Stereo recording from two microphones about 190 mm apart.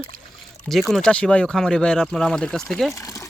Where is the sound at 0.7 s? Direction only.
Centre (ahead or behind).